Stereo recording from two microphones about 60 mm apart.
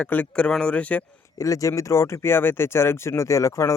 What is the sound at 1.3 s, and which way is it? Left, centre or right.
Speech, left.